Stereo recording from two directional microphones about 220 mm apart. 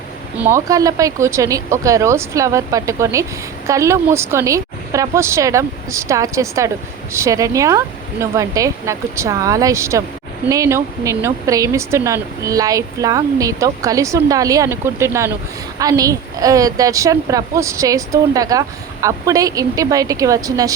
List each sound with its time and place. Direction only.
0.3 s speech: 10° right (ahead or behind)